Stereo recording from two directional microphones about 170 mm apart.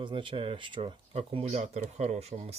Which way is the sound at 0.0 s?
30° right (ahead or behind).